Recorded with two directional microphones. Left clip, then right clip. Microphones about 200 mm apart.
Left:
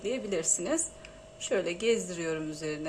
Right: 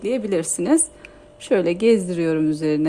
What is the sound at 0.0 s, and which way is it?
A woman's voice, 50° right (ahead or behind).